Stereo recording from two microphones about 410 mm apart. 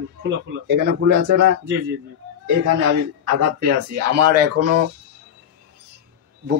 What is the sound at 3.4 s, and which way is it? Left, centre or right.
Speech, right.